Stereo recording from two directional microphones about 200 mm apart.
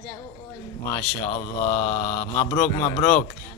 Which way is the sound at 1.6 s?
10° left (ahead or behind).